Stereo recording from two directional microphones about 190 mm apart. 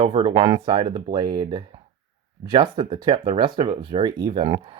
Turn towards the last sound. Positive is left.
turn(degrees=-25)  # may be behind; listen again after turning